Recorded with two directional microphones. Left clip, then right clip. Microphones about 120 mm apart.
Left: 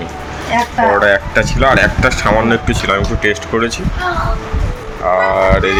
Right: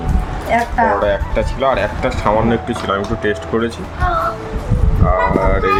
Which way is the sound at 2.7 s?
5° right (ahead or behind).